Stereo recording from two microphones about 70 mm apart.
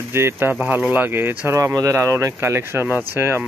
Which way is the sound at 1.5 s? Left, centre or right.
Right.